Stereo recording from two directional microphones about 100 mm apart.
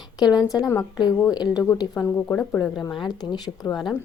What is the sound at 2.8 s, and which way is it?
Speech, 50° left (ahead or behind).